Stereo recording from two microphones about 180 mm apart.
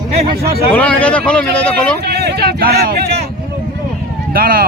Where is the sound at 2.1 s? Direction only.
65° right (ahead or behind).